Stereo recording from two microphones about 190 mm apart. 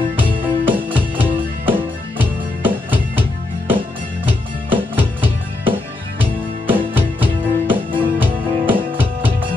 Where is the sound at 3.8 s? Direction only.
25° right (ahead or behind).